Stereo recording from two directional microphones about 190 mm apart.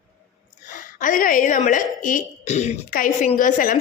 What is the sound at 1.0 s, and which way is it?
Speech, 45° left (ahead or behind).